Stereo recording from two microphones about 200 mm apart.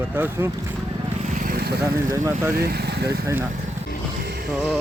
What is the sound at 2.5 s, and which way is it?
Speech, 50° right (ahead or behind).